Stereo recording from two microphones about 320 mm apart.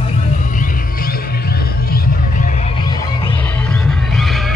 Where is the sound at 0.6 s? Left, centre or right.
Left.